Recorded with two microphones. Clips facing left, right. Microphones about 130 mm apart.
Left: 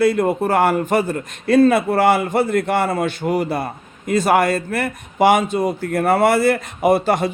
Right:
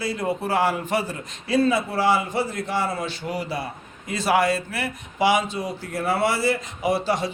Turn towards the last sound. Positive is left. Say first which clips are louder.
# left 7 dB
turn(degrees=55)  # may be behind; listen again after turning